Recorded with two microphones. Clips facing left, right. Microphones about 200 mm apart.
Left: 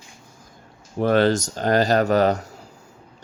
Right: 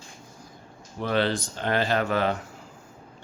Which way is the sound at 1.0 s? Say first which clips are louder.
Left 7 dB; 45° left (ahead or behind).